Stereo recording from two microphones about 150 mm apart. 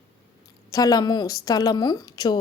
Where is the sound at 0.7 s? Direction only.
25° left (ahead or behind).